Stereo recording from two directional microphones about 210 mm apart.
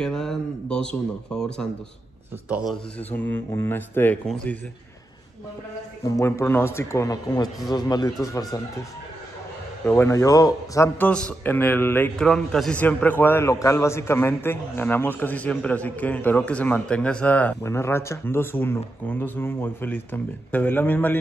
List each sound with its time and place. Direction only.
0.0 s a man's voice: centre (ahead or behind)
6.0 s a man's voice: 15° left (ahead or behind)
9.8 s a man's voice: 10° left (ahead or behind)